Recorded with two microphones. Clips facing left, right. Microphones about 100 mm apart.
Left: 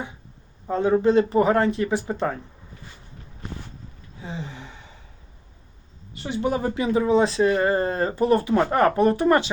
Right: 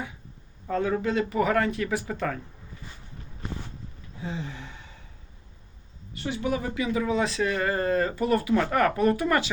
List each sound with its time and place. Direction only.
0.7 s speech: 25° left (ahead or behind)
6.2 s speech: 25° left (ahead or behind)